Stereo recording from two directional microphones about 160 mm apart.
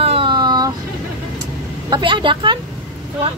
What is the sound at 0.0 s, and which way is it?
Vehicle, 35° right (ahead or behind).